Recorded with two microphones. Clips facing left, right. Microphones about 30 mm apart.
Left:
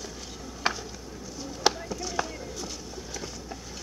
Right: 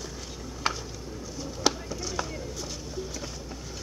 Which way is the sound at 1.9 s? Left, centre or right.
Centre.